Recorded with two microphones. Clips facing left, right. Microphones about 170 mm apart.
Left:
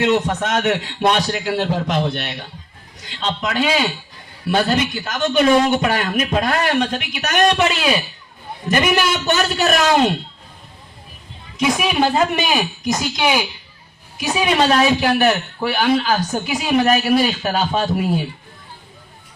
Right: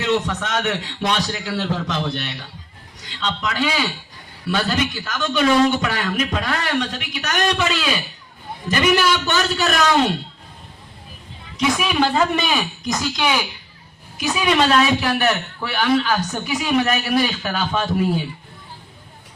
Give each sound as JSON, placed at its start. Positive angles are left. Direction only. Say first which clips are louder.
{"t": 0.1, "sound": "a man's voice", "louder": "left 3 dB", "side_deg": 50}
{"t": 3.2, "sound": "a man's voice", "louder": "left 2 dB", "side_deg": 45}
{"t": 4.5, "sound": "a man's voice", "louder": "left 4 dB", "side_deg": 40}
{"t": 11.6, "sound": "a man's voice", "louder": "left 2 dB", "side_deg": 30}